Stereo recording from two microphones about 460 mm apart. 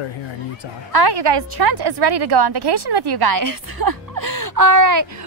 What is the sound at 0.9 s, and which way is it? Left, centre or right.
A woman's voice, right.